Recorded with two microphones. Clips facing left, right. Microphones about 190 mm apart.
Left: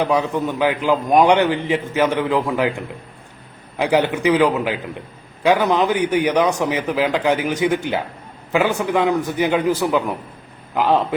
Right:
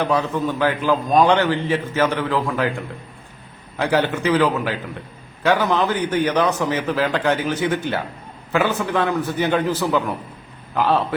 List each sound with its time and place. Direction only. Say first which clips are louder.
0.0 s a man's voice: left 1 dB; 15° left (ahead or behind)
3.8 s a man's voice: left 2 dB; 15° left (ahead or behind)